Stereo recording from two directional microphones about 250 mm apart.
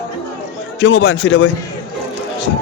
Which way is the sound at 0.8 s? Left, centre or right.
Left.